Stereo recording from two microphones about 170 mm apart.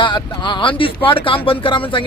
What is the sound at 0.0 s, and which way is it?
Speech, 25° left (ahead or behind).